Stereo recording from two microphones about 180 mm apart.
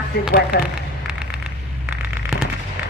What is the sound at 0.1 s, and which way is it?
Speech, 60° left (ahead or behind).